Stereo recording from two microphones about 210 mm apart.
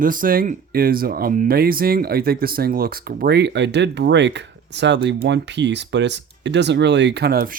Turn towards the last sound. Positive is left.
turn(degrees=-45)  # may be behind; listen again after turning